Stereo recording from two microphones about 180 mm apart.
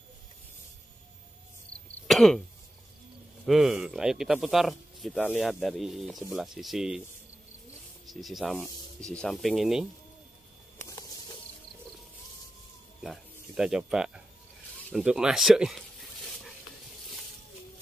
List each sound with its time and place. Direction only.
1.7 s throat clearing: 5° left (ahead or behind)
3.4 s speech: centre (ahead or behind)
8.1 s speech: centre (ahead or behind)
10.8 s a sound: 15° left (ahead or behind)
13.0 s speech: 5° right (ahead or behind)